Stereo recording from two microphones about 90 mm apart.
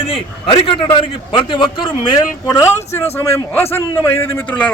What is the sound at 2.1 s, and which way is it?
A man's voice, 40° left (ahead or behind).